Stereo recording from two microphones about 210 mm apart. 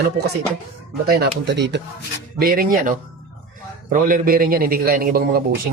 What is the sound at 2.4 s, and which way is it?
A man's voice, 45° right (ahead or behind).